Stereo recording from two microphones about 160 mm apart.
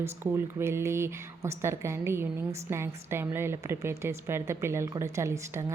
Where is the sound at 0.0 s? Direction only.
15° right (ahead or behind).